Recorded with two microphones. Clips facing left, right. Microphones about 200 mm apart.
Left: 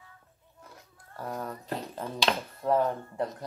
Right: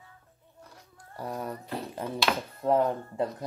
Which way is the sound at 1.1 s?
15° right (ahead or behind).